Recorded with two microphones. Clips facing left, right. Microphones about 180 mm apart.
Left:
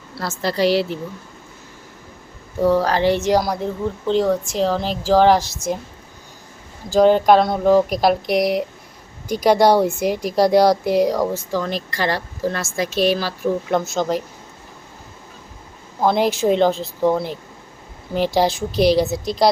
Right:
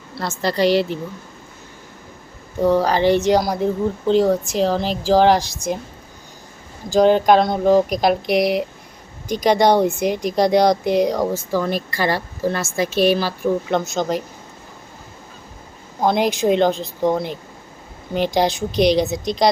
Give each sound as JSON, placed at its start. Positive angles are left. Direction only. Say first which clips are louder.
{"t": 0.2, "sound": "a woman's voice", "louder": "right 1 dB", "side_deg": 5}
{"t": 2.6, "sound": "a woman's voice", "louder": "even", "side_deg": 0}
{"t": 6.9, "sound": "a woman's voice", "louder": "even", "side_deg": 5}
{"t": 13.8, "sound": "a woman's voice", "louder": "left 1 dB", "side_deg": -15}
{"t": 16.0, "sound": "a woman's voice", "louder": "even", "side_deg": -15}
{"t": 19.2, "sound": "a woman's voice", "louder": "left 1 dB", "side_deg": 5}